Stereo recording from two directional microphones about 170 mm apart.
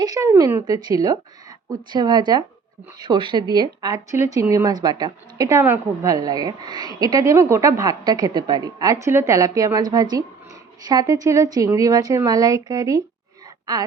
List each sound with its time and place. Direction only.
0.0 s speech: 20° right (ahead or behind)